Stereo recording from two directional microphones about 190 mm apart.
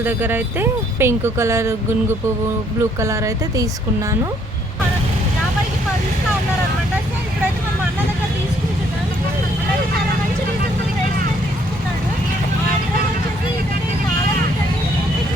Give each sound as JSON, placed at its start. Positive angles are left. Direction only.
{"t": 0.0, "sound": "speech", "side_deg": -10}
{"t": 3.0, "sound": "speech", "side_deg": -15}